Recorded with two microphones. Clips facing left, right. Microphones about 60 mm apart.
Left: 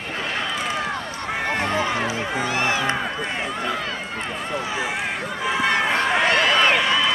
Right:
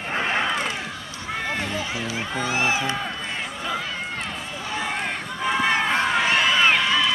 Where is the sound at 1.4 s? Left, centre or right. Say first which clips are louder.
Left 6 dB; left.